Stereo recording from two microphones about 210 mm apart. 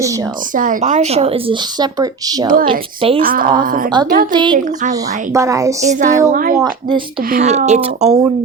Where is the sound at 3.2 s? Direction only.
45° right (ahead or behind).